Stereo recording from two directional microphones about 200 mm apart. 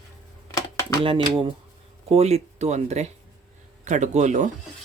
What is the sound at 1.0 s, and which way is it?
Speech, 25° right (ahead or behind).